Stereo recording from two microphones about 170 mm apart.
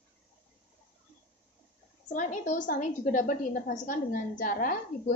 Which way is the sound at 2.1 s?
45° left (ahead or behind).